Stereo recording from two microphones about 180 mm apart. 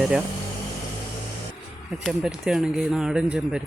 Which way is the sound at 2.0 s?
Centre (ahead or behind).